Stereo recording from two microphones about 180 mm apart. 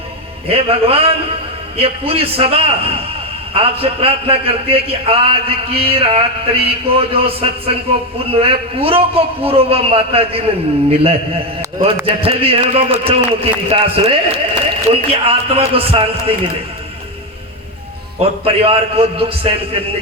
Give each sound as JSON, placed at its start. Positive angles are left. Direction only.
{"t": 0.4, "sound": "a man's voice", "side_deg": -30}
{"t": 18.2, "sound": "a man's voice", "side_deg": -30}